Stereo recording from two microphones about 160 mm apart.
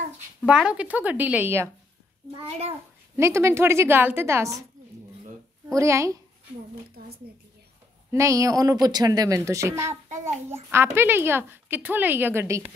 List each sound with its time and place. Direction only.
0.5 s a woman's voice: 5° right (ahead or behind)
3.2 s a woman's voice: 15° right (ahead or behind)
5.7 s speech: 20° right (ahead or behind)
8.1 s speech: 20° right (ahead or behind)
10.0 s a child's voice: 45° right (ahead or behind)
10.5 s a woman's voice: 15° right (ahead or behind)